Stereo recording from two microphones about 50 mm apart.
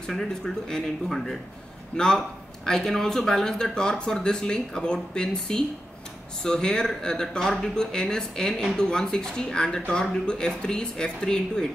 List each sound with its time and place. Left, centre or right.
0.1 s speech: centre